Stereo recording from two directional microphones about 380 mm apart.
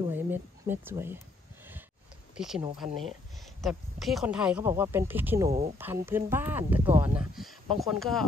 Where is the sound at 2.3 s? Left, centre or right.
Centre.